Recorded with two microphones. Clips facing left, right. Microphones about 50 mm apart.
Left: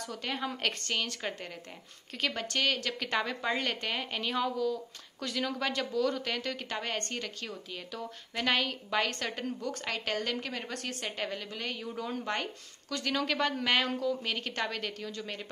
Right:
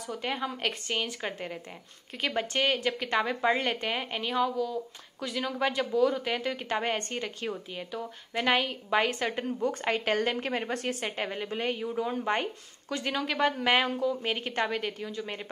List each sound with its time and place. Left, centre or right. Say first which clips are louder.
0.1 s a woman's voice: right 4 dB; centre